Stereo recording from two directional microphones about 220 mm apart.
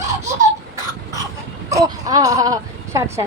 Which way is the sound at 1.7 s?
15° right (ahead or behind).